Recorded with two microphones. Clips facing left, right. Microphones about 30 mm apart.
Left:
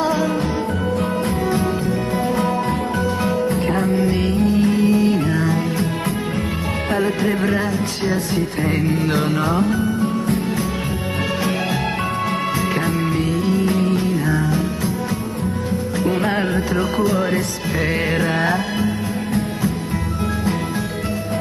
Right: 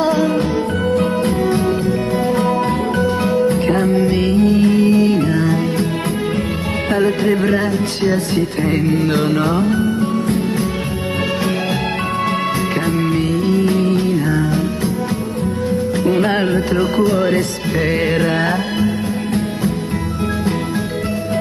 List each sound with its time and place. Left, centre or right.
3.4 s music: right
4.1 s music: right
7.5 s music: centre
13.6 s music: right
16.7 s music: centre
18.2 s music: right